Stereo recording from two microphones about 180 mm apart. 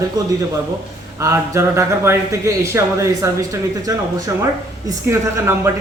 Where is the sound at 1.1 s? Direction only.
15° right (ahead or behind).